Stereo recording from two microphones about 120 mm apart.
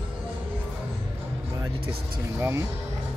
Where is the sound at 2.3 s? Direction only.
20° right (ahead or behind).